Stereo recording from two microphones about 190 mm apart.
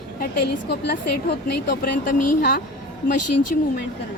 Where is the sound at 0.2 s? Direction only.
60° left (ahead or behind).